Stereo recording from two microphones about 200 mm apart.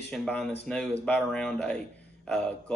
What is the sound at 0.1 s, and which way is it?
Speech, 5° left (ahead or behind).